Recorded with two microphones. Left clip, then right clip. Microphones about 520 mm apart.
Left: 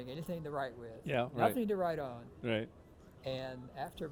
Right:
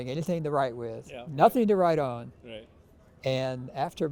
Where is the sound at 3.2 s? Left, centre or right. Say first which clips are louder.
Right 12 dB; right.